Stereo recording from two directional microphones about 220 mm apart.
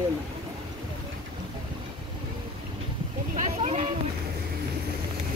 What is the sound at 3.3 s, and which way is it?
Speech, 30° right (ahead or behind).